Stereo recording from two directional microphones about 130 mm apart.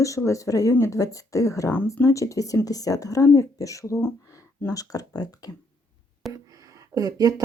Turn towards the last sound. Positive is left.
turn(degrees=-25)  # may be behind; listen again after turning